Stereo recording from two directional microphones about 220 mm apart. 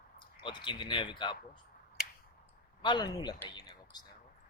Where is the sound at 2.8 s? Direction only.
20° left (ahead or behind).